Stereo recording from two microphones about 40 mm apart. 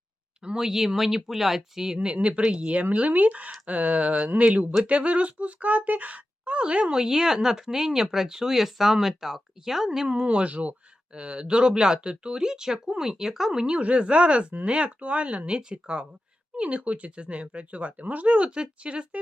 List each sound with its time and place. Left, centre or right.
0.4 s speech: centre
2.1 s speech: right
6.9 s speech: centre
10.2 s speech: right
13.7 s speech: right